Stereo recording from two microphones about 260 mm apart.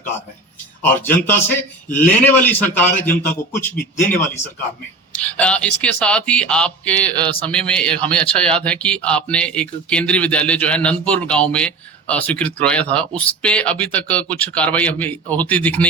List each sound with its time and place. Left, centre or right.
0.8 s a man's voice: centre
5.1 s a man's voice: centre